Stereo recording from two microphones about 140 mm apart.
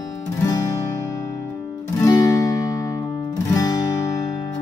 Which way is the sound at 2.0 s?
25° left (ahead or behind).